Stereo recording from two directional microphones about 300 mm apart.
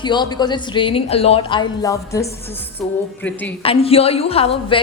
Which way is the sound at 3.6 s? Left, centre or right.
Centre.